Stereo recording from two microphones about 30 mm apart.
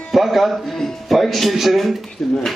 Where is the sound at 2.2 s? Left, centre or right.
Centre.